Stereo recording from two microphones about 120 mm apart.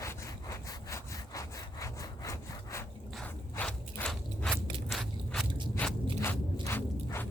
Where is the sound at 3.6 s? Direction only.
10° left (ahead or behind).